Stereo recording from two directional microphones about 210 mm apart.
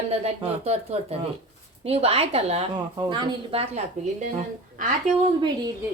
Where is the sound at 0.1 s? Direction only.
30° right (ahead or behind).